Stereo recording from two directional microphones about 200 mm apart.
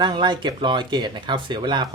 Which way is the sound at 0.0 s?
20° right (ahead or behind).